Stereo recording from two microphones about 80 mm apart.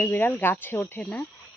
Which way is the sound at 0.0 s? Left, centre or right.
Left.